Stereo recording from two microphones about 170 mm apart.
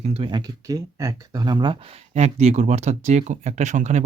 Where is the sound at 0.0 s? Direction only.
35° right (ahead or behind).